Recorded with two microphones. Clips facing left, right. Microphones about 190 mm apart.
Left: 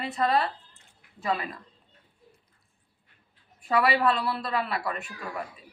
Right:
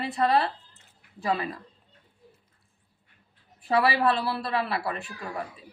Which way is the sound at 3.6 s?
30° right (ahead or behind).